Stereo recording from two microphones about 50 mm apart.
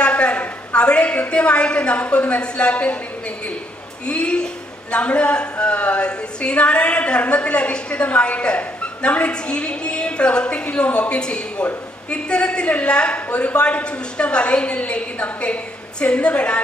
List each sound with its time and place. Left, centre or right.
0.0 s a woman's voice: left
4.1 s a woman's voice: left